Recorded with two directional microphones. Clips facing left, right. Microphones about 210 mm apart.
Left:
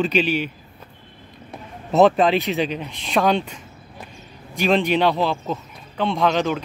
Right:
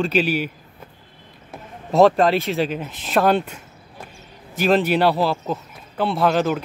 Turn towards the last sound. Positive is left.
turn(degrees=-5)  # may be behind; listen again after turning